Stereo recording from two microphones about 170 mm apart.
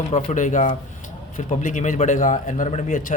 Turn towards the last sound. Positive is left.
turn(degrees=45)  # may be behind; listen again after turning